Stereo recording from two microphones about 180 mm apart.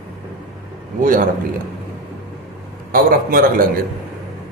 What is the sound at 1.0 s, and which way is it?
Speech, 50° right (ahead or behind).